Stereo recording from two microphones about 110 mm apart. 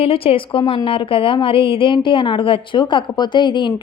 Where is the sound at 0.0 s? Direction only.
60° left (ahead or behind).